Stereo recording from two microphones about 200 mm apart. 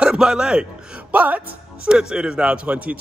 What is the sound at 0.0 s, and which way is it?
A man's voice, 5° right (ahead or behind).